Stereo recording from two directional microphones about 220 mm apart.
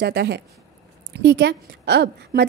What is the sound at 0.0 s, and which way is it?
A woman's voice, 50° right (ahead or behind).